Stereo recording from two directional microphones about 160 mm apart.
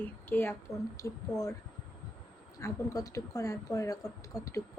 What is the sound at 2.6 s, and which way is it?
A woman's voice, 20° left (ahead or behind).